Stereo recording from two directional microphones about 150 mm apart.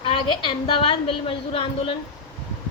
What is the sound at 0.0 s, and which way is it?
A woman's voice, 35° left (ahead or behind).